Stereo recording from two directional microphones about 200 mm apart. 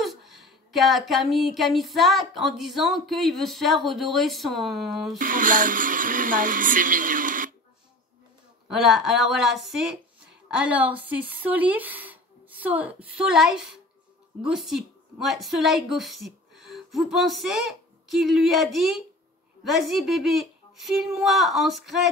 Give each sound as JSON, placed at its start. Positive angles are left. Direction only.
{"t": 0.0, "sound": "a woman's voice", "side_deg": 0}
{"t": 5.2, "sound": "speech", "side_deg": -40}
{"t": 8.6, "sound": "a woman's voice", "side_deg": 0}